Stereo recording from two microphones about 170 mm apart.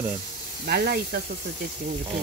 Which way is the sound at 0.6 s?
65° right (ahead or behind).